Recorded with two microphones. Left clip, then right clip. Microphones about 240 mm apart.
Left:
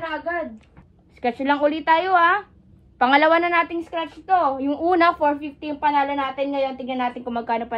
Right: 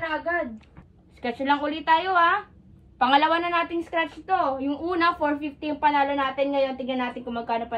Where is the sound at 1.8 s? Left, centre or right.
Left.